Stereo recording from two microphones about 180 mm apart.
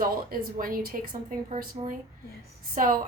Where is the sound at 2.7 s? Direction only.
50° right (ahead or behind).